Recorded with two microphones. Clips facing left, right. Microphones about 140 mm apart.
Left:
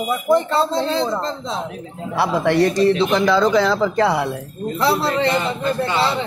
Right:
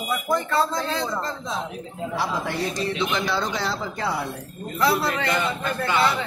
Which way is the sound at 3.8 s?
85° left.